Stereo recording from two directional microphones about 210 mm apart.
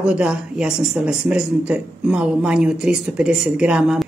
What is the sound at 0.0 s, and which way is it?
Speech, 5° right (ahead or behind).